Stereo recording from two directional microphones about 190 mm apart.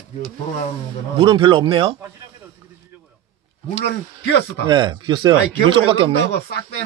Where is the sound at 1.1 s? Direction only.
25° right (ahead or behind).